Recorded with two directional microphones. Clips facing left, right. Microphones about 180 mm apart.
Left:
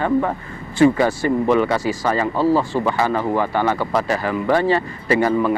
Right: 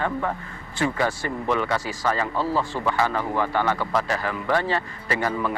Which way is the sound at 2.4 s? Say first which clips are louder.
Left 8 dB; 40° left (ahead or behind).